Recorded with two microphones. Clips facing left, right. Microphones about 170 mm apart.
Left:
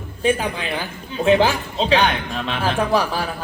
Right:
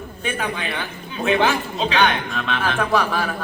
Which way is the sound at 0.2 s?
30° left (ahead or behind).